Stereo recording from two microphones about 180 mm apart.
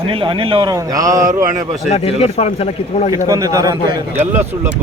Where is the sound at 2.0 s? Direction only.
35° left (ahead or behind).